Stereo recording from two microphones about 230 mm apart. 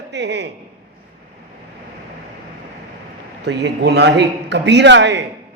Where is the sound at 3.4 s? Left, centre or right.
Right.